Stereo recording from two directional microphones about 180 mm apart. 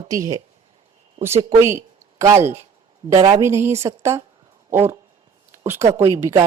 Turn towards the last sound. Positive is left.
turn(degrees=-15)  # may be behind; listen again after turning